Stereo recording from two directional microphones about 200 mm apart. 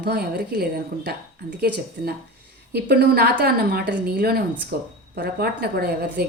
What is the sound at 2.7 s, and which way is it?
A woman's voice, 50° right (ahead or behind).